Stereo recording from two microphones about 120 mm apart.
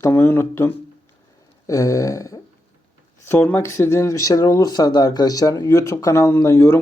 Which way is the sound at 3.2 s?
15° left (ahead or behind).